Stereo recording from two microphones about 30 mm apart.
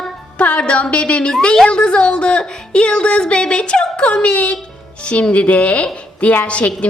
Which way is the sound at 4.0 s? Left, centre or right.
Left.